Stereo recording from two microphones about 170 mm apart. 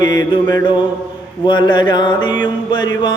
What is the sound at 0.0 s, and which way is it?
Mantra, 25° left (ahead or behind).